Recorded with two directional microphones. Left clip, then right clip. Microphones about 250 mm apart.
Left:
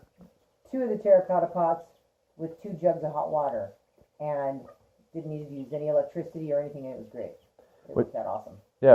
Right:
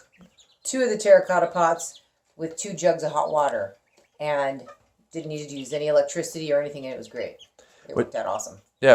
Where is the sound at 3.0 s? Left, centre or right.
Right.